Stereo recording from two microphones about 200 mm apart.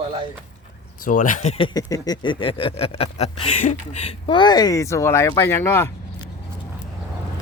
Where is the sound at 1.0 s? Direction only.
40° left (ahead or behind); by 5.8 s 10° left (ahead or behind).